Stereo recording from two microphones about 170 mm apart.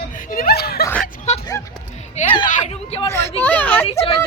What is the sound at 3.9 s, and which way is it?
Speech, 35° left (ahead or behind).